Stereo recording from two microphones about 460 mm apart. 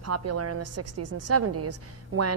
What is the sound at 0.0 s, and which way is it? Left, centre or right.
A woman's voice, right.